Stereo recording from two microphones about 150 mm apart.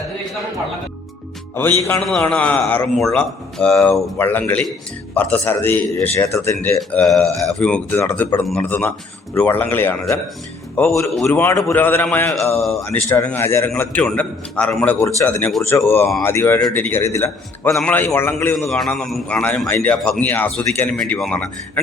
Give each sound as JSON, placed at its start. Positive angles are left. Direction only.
{"t": 1.9, "sound": "a man's voice", "side_deg": 5}
{"t": 7.1, "sound": "a man's voice", "side_deg": 5}
{"t": 17.7, "sound": "a man's voice", "side_deg": 0}
{"t": 17.9, "sound": "a man's voice", "side_deg": 15}
{"t": 18.5, "sound": "a man's voice", "side_deg": 5}